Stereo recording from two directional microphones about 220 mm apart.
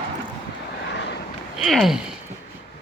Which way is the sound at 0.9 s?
50° left (ahead or behind).